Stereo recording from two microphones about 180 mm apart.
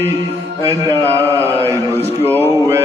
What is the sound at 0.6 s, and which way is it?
Mantra, 15° right (ahead or behind).